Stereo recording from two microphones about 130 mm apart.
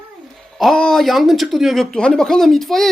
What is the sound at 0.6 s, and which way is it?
Speech, 5° left (ahead or behind).